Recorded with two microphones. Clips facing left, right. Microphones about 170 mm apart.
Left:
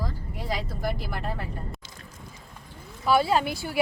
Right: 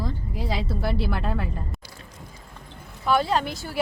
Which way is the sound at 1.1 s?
90° right.